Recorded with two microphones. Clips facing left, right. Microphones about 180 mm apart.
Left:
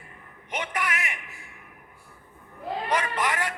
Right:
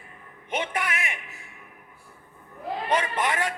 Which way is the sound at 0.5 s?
30° right (ahead or behind).